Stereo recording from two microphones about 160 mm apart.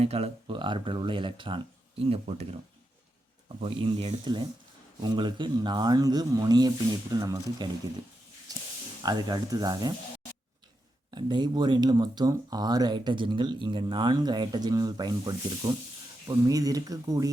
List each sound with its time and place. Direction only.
0.0 s speech: 40° right (ahead or behind)
3.6 s speech: 35° right (ahead or behind)
9.0 s speech: 25° right (ahead or behind)
11.1 s speech: 25° right (ahead or behind)